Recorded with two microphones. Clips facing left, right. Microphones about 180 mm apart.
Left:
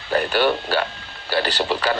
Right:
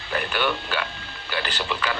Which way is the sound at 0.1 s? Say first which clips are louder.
Left 6 dB; 35° left (ahead or behind).